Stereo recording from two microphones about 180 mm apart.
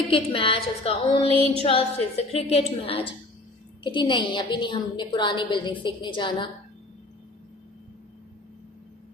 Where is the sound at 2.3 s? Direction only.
35° left (ahead or behind).